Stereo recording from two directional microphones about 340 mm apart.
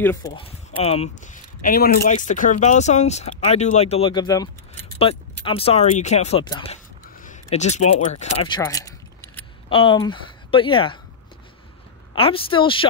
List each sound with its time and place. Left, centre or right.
0.0 s speech: centre
12.2 s speech: centre